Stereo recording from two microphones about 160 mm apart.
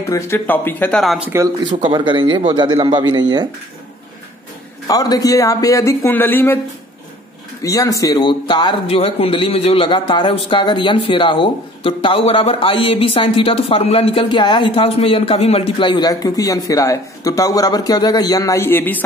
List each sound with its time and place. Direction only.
0.1 s speech: 15° left (ahead or behind); by 1.3 s centre (ahead or behind)
1.7 s a man's voice: 30° right (ahead or behind)
4.8 s speech: 20° left (ahead or behind)
7.6 s a man's voice: 20° left (ahead or behind)